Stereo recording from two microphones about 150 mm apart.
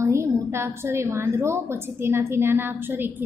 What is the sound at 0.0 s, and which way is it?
A woman's voice, 20° right (ahead or behind).